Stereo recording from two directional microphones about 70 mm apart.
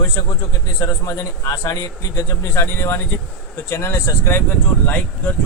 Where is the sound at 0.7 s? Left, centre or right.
Left.